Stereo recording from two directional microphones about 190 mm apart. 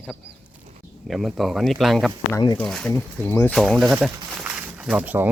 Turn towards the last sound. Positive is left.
turn(degrees=-10)  # may be behind; listen again after turning